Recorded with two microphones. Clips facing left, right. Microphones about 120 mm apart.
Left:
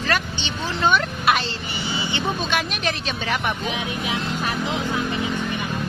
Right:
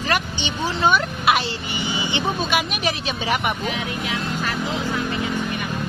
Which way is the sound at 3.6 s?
20° left (ahead or behind).